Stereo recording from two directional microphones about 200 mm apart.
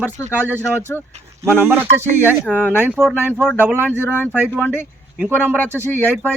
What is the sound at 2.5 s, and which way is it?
Speech, 10° left (ahead or behind).